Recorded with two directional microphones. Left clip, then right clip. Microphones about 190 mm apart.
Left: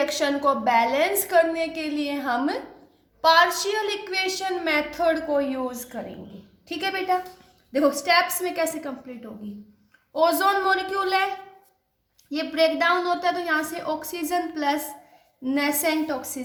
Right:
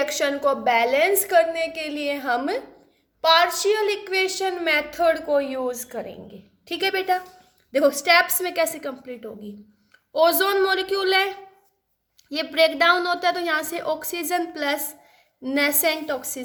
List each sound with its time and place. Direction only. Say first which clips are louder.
0.0 s a woman's voice: even; 40° right (ahead or behind)
12.3 s a woman's voice: right 2 dB; 50° right (ahead or behind)